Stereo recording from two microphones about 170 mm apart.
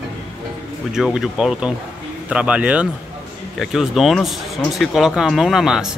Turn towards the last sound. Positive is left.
turn(degrees=-5)  # may be behind; listen again after turning